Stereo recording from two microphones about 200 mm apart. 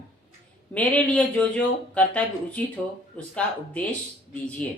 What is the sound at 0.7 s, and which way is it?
Speech, 5° left (ahead or behind).